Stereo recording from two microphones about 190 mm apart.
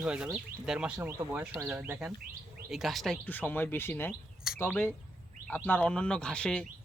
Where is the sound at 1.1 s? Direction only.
15° right (ahead or behind).